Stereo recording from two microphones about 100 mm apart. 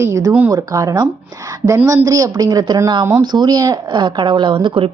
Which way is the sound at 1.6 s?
75° right (ahead or behind).